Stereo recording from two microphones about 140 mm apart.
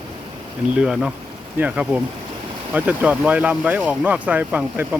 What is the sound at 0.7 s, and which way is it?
Speech, 5° right (ahead or behind).